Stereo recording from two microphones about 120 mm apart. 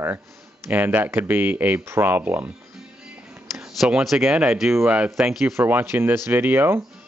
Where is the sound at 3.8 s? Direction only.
5° right (ahead or behind).